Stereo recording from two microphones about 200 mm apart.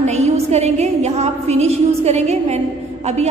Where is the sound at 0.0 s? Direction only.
35° right (ahead or behind).